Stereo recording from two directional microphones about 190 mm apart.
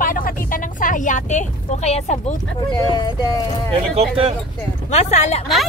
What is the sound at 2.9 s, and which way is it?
Speech, 25° left (ahead or behind).